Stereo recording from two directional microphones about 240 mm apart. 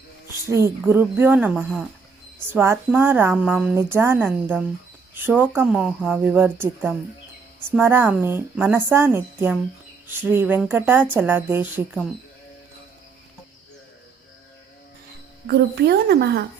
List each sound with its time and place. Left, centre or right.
0.5 s speech: centre
15.4 s a woman's voice: right